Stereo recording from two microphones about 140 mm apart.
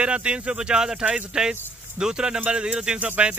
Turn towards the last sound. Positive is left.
turn(degrees=-10)  # may be behind; listen again after turning